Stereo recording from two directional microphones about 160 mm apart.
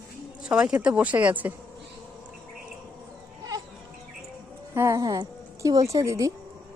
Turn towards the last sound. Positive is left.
turn(degrees=-20)  # may be behind; listen again after turning